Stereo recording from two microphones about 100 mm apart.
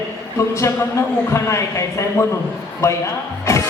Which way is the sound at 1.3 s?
30° left (ahead or behind).